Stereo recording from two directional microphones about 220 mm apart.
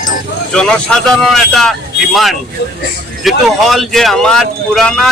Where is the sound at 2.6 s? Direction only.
55° left (ahead or behind).